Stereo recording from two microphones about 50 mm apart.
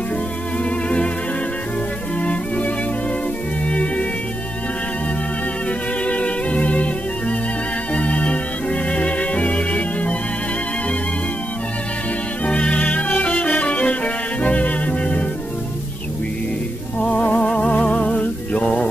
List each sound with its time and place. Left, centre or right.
0.7 s music: left
2.1 s violin: left
3.6 s music: left
5.7 s music: left
7.9 s organ: left
12.4 s music: left
17.0 s music: left